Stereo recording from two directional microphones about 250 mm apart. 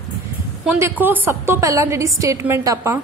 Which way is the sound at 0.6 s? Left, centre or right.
Centre.